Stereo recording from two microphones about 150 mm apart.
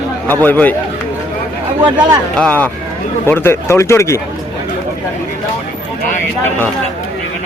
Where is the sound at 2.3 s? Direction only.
5° left (ahead or behind).